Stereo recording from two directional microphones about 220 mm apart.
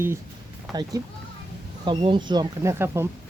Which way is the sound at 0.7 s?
Centre (ahead or behind).